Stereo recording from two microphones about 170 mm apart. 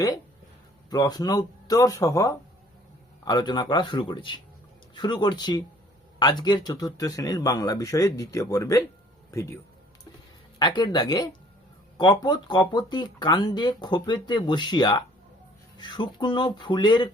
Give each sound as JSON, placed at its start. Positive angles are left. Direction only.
{"t": 0.9, "sound": "speech", "side_deg": 25}
{"t": 10.6, "sound": "speech", "side_deg": 25}